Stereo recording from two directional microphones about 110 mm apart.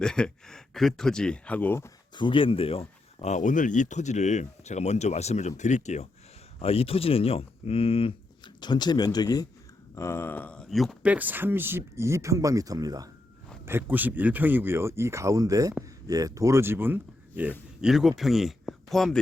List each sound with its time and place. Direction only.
0.0 s speech: 5° left (ahead or behind)
2.1 s speech: 50° left (ahead or behind); by 6.1 s 90° left
6.6 s speech: 65° left (ahead or behind)
8.6 s speech: 40° left (ahead or behind)
9.9 s speech: 25° left (ahead or behind); by 10.9 s centre (ahead or behind)
11.0 s speech: 15° right (ahead or behind); by 13.1 s 35° right (ahead or behind)
13.7 s speech: 20° right (ahead or behind)
17.7 s speech: 5° right (ahead or behind)